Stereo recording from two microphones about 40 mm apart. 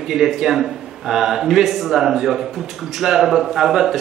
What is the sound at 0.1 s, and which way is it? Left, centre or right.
A man's voice, centre.